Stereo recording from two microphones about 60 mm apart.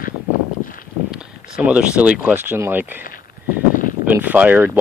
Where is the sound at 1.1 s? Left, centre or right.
Centre.